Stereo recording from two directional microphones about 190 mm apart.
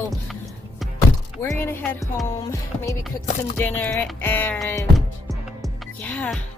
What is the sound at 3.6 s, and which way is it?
Music, 10° left (ahead or behind).